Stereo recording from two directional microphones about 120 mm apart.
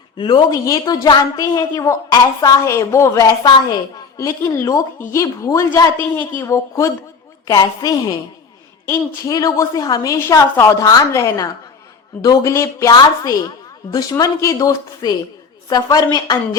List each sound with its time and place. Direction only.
0.2 s speech: 40° left (ahead or behind)
0.5 s a child's voice: 30° left (ahead or behind)
6.0 s a child's voice: 20° left (ahead or behind)